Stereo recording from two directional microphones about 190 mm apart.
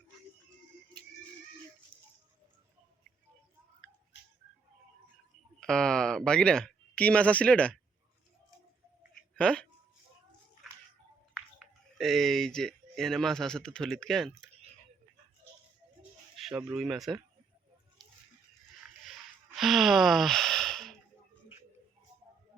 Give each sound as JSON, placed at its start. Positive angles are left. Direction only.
{"t": 5.5, "sound": "speech", "side_deg": 5}
{"t": 9.3, "sound": "a sound", "side_deg": 5}
{"t": 11.9, "sound": "speech", "side_deg": 0}
{"t": 16.6, "sound": "speech", "side_deg": -5}
{"t": 19.5, "sound": "speech", "side_deg": 0}